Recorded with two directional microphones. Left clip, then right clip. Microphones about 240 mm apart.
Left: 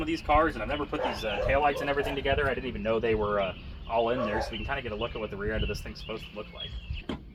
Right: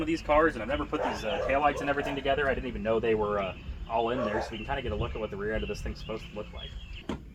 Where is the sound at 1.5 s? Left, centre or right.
Centre.